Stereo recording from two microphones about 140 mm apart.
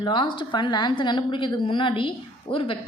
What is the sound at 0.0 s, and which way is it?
A woman's voice, 35° left (ahead or behind).